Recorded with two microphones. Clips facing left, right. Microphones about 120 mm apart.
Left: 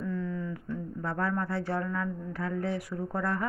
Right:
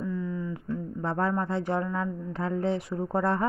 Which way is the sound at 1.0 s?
30° right (ahead or behind).